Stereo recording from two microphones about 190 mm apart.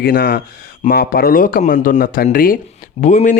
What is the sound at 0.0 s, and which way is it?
Speech, 50° left (ahead or behind).